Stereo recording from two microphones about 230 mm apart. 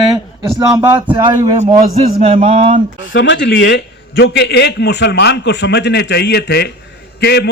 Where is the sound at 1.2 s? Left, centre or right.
Right.